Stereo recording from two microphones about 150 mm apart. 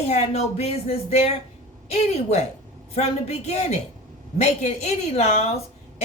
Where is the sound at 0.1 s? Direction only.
45° left (ahead or behind).